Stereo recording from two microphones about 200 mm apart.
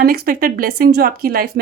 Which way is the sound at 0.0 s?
50° right (ahead or behind).